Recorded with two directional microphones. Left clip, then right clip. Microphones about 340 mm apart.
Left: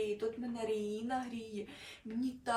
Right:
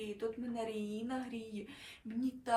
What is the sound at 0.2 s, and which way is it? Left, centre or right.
Speech, centre.